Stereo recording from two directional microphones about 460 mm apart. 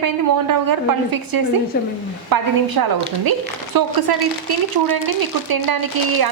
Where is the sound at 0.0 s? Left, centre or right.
Right.